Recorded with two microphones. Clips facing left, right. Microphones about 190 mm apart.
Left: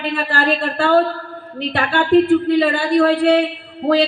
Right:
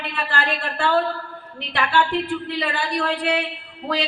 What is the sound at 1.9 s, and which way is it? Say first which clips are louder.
Speech: left 10 dB; 50° left (ahead or behind).